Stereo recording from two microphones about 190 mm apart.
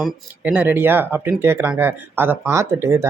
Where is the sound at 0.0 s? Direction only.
5° right (ahead or behind).